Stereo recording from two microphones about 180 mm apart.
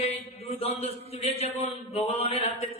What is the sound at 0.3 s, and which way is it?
A man's voice, 35° left (ahead or behind).